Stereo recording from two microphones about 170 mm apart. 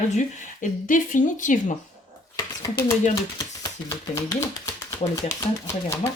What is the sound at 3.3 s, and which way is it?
Speech, 20° left (ahead or behind).